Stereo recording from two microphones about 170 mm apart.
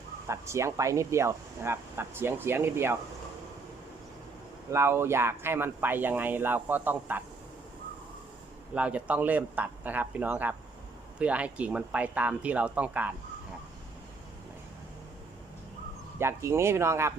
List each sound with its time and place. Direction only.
0.3 s speech: 15° right (ahead or behind)
4.7 s speech: 15° right (ahead or behind)
8.7 s speech: 10° right (ahead or behind)
16.1 s speech: 15° right (ahead or behind)